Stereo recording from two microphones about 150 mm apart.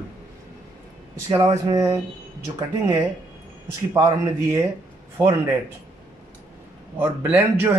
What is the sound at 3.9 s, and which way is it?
Speech, 20° right (ahead or behind).